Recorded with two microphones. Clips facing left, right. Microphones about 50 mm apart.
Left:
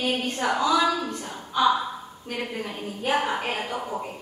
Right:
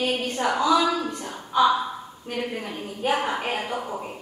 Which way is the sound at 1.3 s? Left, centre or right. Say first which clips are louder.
Right 2 dB; centre.